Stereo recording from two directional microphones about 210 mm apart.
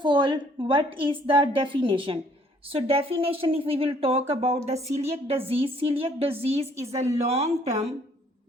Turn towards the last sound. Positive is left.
turn(degrees=-30)  # may be behind; listen again after turning